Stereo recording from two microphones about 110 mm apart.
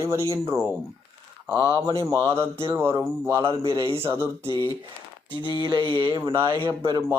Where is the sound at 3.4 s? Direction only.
50° right (ahead or behind).